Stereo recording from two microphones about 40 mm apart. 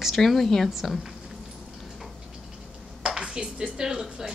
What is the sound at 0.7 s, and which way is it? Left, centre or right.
Speech, centre.